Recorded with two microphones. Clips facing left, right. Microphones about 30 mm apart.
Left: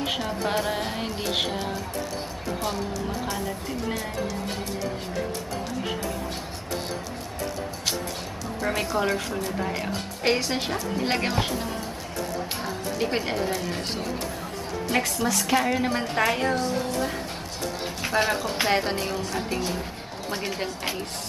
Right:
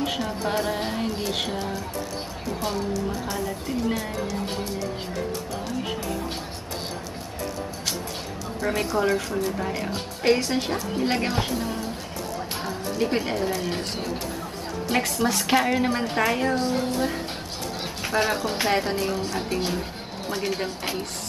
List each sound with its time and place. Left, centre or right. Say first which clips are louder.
0.0 s music: right 1 dB; centre
0.5 s a woman's voice: right 1 dB; centre
2.6 s speech: right 3 dB; centre
8.5 s a woman's voice: right 1 dB; centre
12.6 s speech: right 3 dB; centre
14.9 s speech: right 2 dB; centre
16.5 s speech: right 2 dB; right
18.0 s a woman's voice: even; centre
20.2 s speech: right 2 dB; centre